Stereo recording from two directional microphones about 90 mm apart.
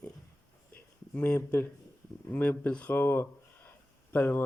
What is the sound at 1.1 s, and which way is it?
Speech, 20° left (ahead or behind).